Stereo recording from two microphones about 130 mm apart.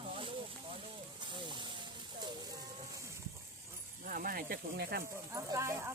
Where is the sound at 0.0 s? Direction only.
40° right (ahead or behind).